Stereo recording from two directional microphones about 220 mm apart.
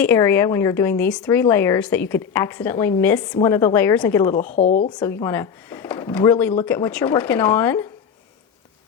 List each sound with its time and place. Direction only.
0.0 s a woman's voice: 10° left (ahead or behind)
4.5 s speech: 35° left (ahead or behind)
4.9 s a woman's voice: 10° left (ahead or behind)